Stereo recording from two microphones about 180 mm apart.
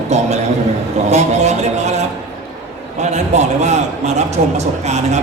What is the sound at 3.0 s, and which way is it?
A man's voice, 40° right (ahead or behind).